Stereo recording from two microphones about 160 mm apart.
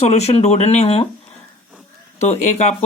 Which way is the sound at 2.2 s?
45° left (ahead or behind).